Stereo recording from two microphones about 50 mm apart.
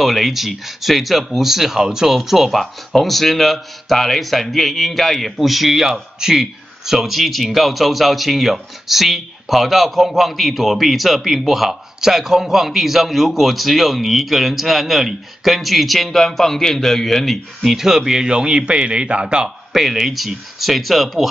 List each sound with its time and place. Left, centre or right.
0.0 s speech: centre
17.6 s a man's voice: centre
19.7 s speech: centre